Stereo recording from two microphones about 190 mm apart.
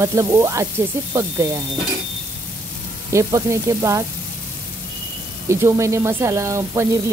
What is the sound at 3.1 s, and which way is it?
Speech, 15° right (ahead or behind).